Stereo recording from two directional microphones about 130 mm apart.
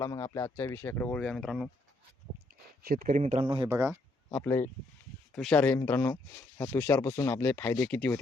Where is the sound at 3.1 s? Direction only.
65° right (ahead or behind).